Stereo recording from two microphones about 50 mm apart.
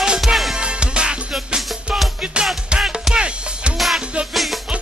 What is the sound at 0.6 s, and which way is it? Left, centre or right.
Music, centre.